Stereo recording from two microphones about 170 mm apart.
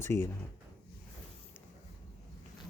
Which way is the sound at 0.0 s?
15° left (ahead or behind).